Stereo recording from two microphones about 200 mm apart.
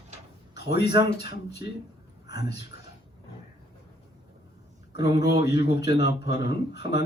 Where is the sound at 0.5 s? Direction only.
55° left (ahead or behind).